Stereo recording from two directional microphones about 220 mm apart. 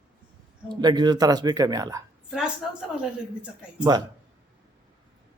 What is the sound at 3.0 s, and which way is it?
Speech, 5° right (ahead or behind).